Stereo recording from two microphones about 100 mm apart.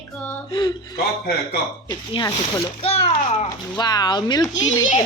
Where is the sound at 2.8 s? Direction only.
75° left (ahead or behind).